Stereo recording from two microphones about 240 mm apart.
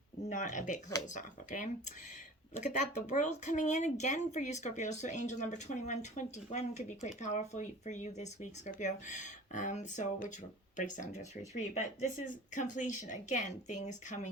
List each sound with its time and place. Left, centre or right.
0.3 s speech: left